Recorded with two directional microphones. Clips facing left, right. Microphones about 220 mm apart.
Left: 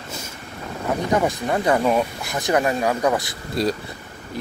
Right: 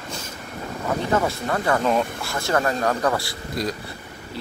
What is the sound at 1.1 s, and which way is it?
Speech, 15° left (ahead or behind).